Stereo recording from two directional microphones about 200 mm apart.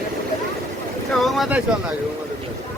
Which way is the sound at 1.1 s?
Centre (ahead or behind).